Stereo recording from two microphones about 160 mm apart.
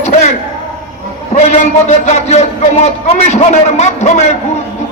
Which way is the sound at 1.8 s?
45° left (ahead or behind).